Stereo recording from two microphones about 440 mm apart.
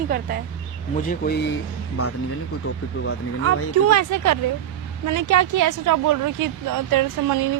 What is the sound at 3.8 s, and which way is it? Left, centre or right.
A woman's voice, right.